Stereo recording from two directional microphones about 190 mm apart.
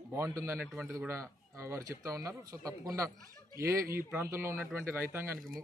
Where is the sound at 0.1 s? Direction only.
15° right (ahead or behind).